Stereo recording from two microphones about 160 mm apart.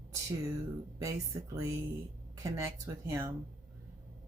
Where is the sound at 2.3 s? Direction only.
20° right (ahead or behind).